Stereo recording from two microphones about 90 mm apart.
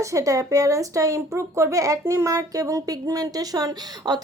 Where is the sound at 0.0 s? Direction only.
35° right (ahead or behind).